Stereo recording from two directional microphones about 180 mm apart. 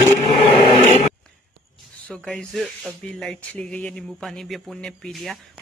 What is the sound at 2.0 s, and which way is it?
Speech, 5° left (ahead or behind).